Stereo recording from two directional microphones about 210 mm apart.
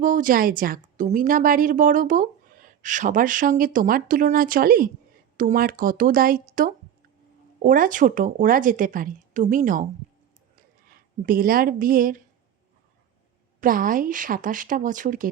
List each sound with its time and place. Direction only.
0.0 s a woman's voice: 40° right (ahead or behind)
10.8 s speech: 40° right (ahead or behind)
13.6 s a woman's voice: 40° right (ahead or behind)